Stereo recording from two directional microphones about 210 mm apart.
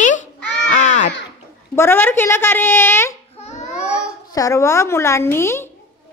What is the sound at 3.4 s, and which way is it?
Baby cry, 35° left (ahead or behind).